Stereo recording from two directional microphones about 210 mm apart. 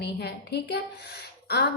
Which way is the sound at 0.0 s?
50° left (ahead or behind).